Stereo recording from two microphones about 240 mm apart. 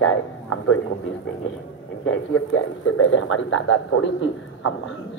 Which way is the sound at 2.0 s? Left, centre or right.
Left.